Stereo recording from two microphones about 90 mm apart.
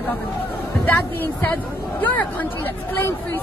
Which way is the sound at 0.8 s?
25° left (ahead or behind).